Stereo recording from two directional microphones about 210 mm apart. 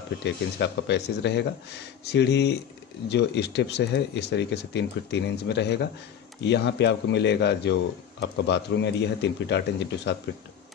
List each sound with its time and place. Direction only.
0.2 s speech: 55° left (ahead or behind)